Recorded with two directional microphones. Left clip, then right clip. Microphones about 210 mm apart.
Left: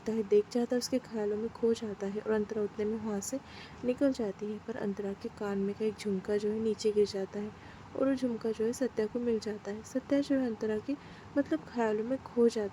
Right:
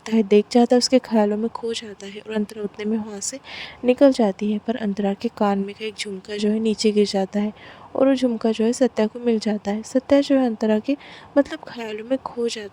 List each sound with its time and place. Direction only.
0.0 s speech: 40° right (ahead or behind)